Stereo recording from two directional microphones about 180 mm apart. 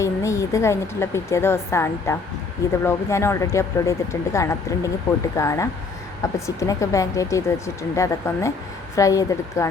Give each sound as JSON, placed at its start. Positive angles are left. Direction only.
{"t": 0.0, "sound": "a woman's voice", "side_deg": 15}